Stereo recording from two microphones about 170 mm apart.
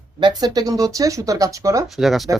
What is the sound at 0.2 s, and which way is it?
Speech, 25° right (ahead or behind).